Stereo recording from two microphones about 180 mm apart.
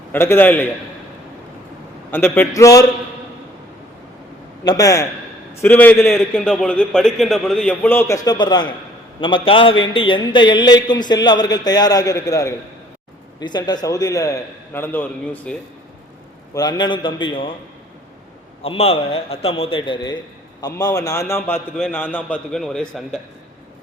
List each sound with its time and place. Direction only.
0.1 s a man's voice: 10° left (ahead or behind)
2.0 s a man's voice: 10° left (ahead or behind)
4.6 s a man's voice: 20° left (ahead or behind)
16.6 s a man's voice: 20° left (ahead or behind)
18.6 s a man's voice: 30° left (ahead or behind); by 23.2 s 5° left (ahead or behind)